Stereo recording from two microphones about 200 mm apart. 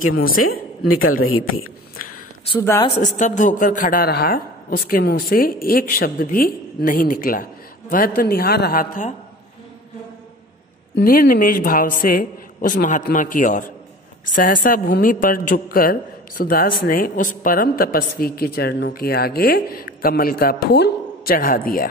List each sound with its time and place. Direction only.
0.4 s a woman's voice: 90° left
2.6 s a woman's voice: 15° left (ahead or behind)
3.0 s a woman's voice: 40° left (ahead or behind)
11.0 s a woman's voice: 45° left (ahead or behind)